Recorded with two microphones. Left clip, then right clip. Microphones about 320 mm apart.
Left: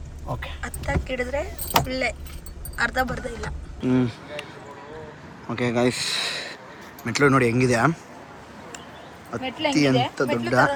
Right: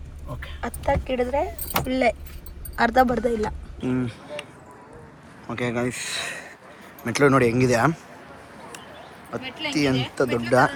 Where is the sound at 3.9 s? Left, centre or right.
Centre.